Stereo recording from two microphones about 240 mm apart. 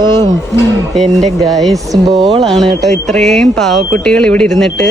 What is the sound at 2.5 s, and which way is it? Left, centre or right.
Speech, centre.